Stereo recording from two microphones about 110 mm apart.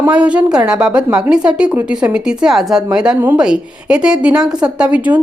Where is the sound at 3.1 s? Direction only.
15° right (ahead or behind).